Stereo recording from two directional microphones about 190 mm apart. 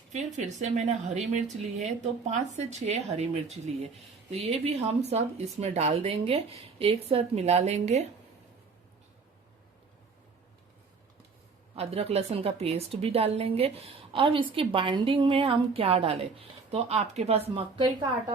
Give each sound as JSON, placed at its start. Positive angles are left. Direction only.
{"t": 0.1, "sound": "a woman's voice", "side_deg": -35}
{"t": 11.7, "sound": "a woman's voice", "side_deg": -30}